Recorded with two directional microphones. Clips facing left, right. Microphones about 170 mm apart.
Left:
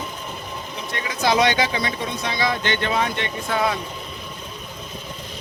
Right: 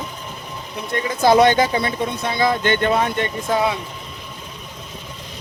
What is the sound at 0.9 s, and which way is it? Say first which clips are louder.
Speech: right 6 dB; 50° right (ahead or behind).